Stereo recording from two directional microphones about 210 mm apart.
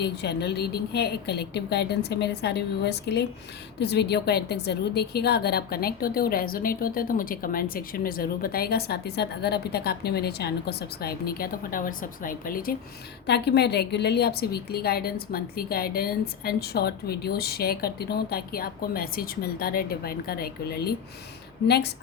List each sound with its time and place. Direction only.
0.0 s a woman's voice: 50° left (ahead or behind)